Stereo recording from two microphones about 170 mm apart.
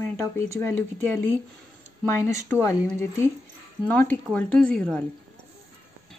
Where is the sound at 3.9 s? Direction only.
10° left (ahead or behind).